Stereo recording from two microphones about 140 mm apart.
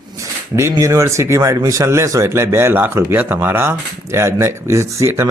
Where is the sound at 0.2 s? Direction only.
20° right (ahead or behind).